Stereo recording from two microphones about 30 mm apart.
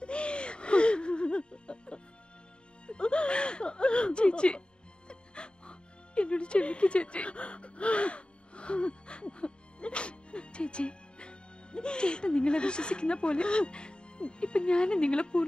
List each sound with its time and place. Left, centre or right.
0.0 s music: left